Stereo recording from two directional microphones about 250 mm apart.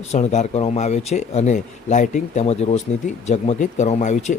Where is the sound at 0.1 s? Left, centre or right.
Left.